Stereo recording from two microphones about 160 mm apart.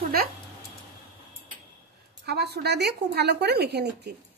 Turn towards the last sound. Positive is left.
turn(degrees=-90)